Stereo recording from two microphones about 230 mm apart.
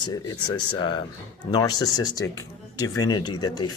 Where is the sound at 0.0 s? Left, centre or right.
Centre.